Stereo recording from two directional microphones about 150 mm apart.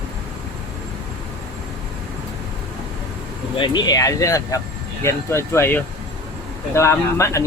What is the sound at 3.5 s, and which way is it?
Speech, 30° left (ahead or behind).